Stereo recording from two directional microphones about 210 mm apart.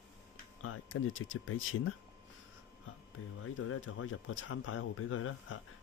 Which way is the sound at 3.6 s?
65° left (ahead or behind).